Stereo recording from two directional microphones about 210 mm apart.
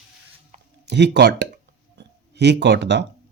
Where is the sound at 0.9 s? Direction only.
55° right (ahead or behind).